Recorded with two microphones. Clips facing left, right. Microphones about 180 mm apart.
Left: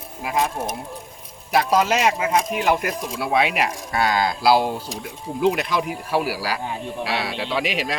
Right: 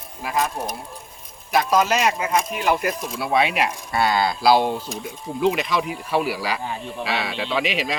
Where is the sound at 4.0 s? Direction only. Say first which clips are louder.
Right 1 dB; 10° left (ahead or behind).